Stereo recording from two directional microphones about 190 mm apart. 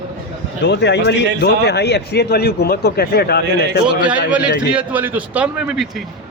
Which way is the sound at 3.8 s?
5° right (ahead or behind).